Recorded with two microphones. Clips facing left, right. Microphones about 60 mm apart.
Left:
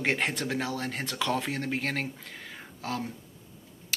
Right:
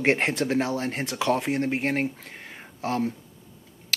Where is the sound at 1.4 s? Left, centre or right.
Right.